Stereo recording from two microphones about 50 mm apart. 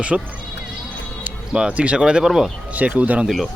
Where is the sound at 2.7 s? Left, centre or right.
Right.